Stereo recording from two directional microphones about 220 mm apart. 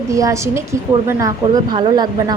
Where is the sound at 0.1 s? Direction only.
15° right (ahead or behind).